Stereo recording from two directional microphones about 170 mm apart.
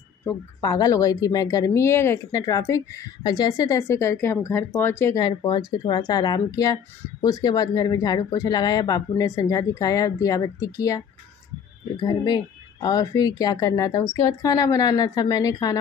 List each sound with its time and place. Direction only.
0.2 s a woman's voice: 20° left (ahead or behind)
12.0 s a woman's voice: 25° left (ahead or behind)